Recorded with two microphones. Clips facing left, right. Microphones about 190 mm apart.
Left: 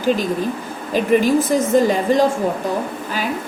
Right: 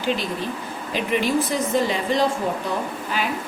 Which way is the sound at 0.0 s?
45° left (ahead or behind).